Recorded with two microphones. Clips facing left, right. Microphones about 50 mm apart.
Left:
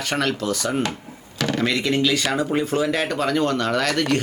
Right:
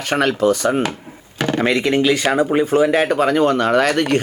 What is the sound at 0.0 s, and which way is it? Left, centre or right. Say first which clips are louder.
Speech: right 7 dB; right.